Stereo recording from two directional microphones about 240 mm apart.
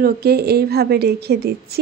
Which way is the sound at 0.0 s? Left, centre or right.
Right.